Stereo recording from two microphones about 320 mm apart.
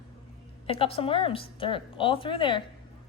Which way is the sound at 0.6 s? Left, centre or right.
Centre.